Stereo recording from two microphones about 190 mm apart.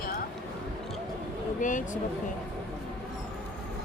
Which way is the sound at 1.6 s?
40° left (ahead or behind).